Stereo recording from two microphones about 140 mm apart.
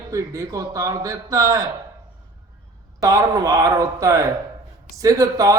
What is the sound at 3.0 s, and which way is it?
Speech, 25° right (ahead or behind).